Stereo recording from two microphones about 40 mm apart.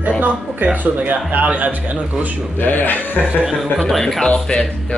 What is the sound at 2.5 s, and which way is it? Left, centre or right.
Speech, left.